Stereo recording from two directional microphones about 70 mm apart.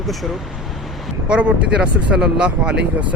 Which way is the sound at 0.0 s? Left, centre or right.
Centre.